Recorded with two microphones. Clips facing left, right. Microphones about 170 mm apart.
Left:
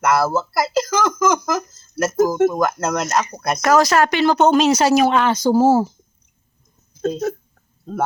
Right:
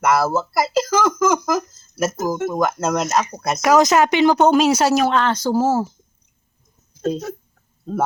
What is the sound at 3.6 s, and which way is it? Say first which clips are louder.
Speech: right 1 dB; 20° right (ahead or behind).